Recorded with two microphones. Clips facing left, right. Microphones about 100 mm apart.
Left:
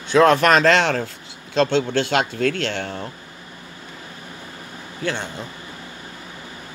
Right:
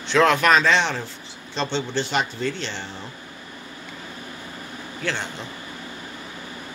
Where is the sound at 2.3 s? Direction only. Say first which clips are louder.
Left 6 dB; 60° left (ahead or behind).